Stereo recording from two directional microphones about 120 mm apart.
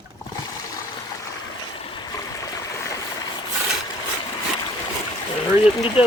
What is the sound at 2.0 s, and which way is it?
Stream, 30° left (ahead or behind).